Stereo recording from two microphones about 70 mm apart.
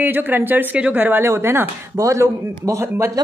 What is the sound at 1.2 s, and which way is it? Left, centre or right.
Speech, right.